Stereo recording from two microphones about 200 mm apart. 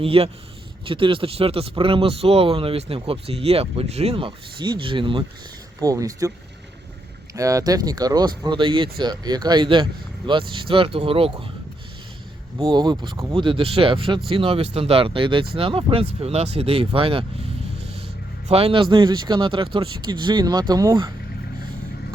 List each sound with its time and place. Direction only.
0.0 s speech: 30° right (ahead or behind)
7.3 s speech: 15° right (ahead or behind)
12.5 s speech: 20° right (ahead or behind)
18.4 s speech: 30° right (ahead or behind)